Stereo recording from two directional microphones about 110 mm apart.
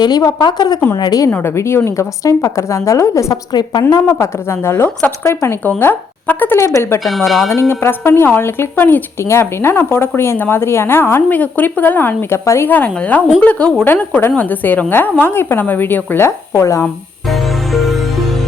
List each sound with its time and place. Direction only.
0.0 s a woman's voice: 35° left (ahead or behind)
1.5 s speech: 25° left (ahead or behind)
3.5 s speech: 40° left (ahead or behind)
7.0 s speech: centre (ahead or behind)
7.7 s a woman's voice: 20° left (ahead or behind)